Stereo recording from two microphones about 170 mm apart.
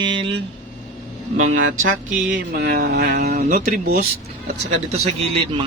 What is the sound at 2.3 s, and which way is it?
Speech, 60° right (ahead or behind).